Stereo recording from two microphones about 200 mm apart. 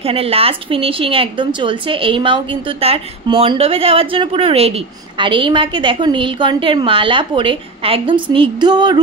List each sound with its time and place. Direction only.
0.0 s a woman's voice: 30° right (ahead or behind)